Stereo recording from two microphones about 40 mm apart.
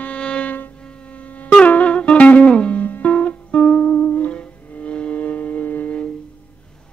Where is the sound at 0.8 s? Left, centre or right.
Left.